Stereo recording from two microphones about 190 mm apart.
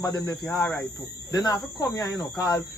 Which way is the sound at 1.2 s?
20° left (ahead or behind).